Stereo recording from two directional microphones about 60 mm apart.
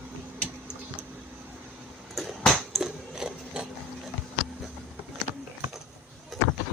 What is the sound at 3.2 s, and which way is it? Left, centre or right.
Wood, centre.